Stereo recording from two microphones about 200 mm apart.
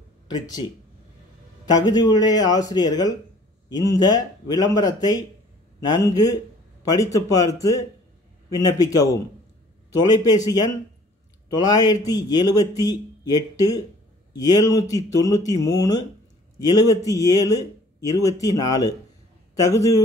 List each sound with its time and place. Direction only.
1.7 s a man's voice: 20° left (ahead or behind)